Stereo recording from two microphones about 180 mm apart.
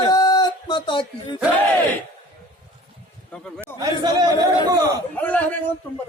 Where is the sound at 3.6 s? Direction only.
20° right (ahead or behind).